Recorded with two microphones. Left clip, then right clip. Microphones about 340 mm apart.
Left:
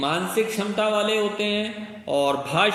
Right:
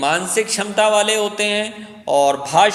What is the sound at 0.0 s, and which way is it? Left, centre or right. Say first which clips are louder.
A man's voice: right 5 dB; right.